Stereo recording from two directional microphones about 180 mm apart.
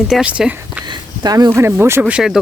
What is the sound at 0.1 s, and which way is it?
Speech, 5° right (ahead or behind).